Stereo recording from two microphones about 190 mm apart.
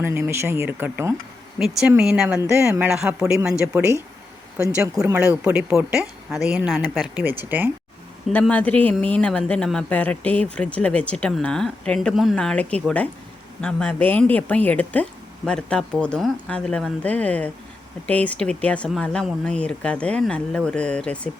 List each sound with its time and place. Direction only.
0.0 s speech: 15° right (ahead or behind)
8.3 s speech: 10° left (ahead or behind)